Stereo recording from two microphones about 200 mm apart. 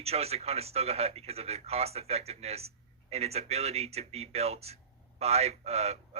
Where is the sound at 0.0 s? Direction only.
30° right (ahead or behind).